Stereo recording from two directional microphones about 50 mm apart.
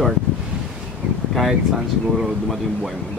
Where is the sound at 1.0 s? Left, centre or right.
Right.